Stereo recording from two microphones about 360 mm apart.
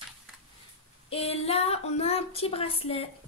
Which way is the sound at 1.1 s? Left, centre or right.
Centre.